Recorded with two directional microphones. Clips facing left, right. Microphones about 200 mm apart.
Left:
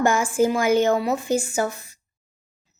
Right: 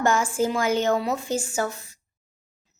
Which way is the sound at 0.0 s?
10° left (ahead or behind).